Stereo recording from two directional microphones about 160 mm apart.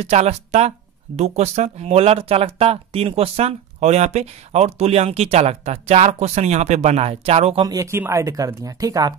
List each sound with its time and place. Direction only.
0.0 s speech: 45° right (ahead or behind)
7.6 s speech: 20° right (ahead or behind)